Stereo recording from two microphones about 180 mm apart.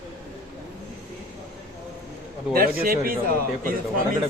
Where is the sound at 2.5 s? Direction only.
55° right (ahead or behind).